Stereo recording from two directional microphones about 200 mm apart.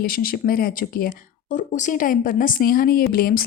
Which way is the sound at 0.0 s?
45° left (ahead or behind).